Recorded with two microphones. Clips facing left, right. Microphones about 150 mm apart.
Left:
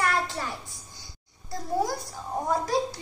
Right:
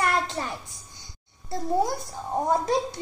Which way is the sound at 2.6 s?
20° right (ahead or behind).